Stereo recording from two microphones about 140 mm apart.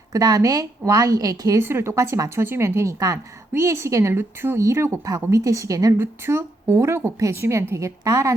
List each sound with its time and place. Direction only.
0.1 s a woman's voice: 25° right (ahead or behind)